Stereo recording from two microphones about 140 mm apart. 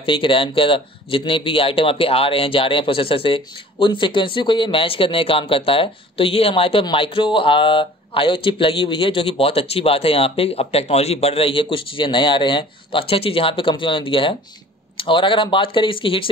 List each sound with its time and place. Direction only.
0.0 s a man's voice: 40° left (ahead or behind)